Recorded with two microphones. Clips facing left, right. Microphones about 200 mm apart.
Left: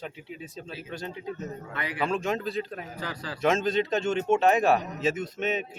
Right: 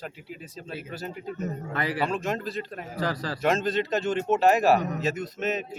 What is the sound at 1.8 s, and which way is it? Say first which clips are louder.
Speech: right 6 dB; 40° right (ahead or behind).